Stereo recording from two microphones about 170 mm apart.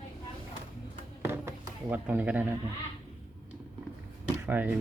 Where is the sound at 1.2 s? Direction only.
15° right (ahead or behind).